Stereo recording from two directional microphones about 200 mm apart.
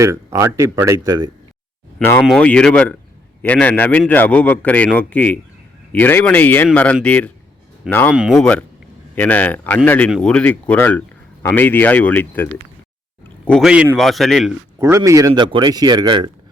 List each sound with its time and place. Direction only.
0.0 s speech: 15° right (ahead or behind)
2.0 s a man's voice: 10° left (ahead or behind)
8.1 s a man's voice: 5° right (ahead or behind)
14.8 s speech: 15° right (ahead or behind)